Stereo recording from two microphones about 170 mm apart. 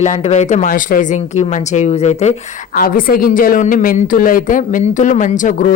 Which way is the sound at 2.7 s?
55° left (ahead or behind).